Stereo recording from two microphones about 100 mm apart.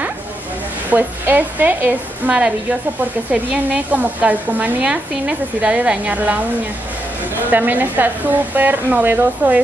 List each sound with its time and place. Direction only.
0.8 s speech: 20° right (ahead or behind)
7.4 s speech: 20° right (ahead or behind)